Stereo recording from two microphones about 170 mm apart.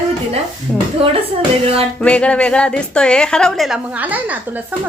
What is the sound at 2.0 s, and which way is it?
A woman's voice, 5° left (ahead or behind).